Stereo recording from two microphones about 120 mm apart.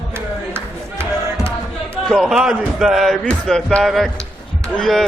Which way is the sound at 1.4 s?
5° left (ahead or behind).